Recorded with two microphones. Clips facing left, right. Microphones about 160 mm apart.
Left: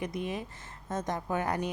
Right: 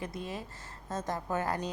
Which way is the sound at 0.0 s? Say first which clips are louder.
Left 4 dB; 20° left (ahead or behind).